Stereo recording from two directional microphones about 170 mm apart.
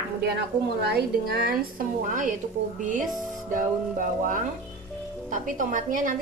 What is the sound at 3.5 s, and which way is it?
A woman's voice, 50° right (ahead or behind).